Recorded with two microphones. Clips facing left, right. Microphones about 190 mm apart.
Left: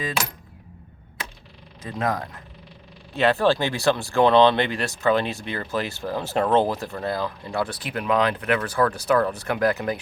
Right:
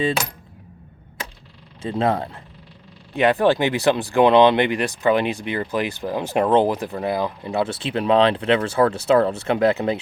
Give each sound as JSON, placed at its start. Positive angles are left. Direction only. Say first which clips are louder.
{"t": 1.8, "sound": "speech", "louder": "right 5 dB", "side_deg": -30}
{"t": 3.1, "sound": "speech", "louder": "right 3 dB", "side_deg": -15}